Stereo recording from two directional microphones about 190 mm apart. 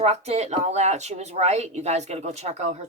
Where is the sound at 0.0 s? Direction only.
35° right (ahead or behind).